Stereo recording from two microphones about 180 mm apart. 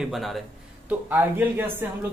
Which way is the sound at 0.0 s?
Centre (ahead or behind).